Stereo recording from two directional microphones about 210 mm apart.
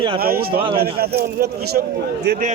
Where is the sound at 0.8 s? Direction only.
50° right (ahead or behind).